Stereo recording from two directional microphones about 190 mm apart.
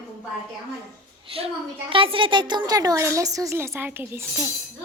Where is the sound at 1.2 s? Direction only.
30° right (ahead or behind).